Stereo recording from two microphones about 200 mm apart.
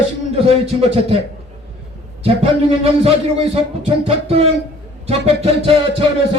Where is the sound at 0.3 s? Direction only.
30° right (ahead or behind).